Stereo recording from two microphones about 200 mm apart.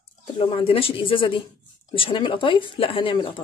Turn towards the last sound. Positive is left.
turn(degrees=25)  # may be behind; listen again after turning